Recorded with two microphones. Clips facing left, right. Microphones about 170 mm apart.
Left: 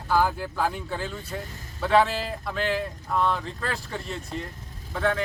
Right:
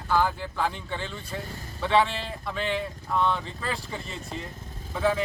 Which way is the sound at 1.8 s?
Centre (ahead or behind).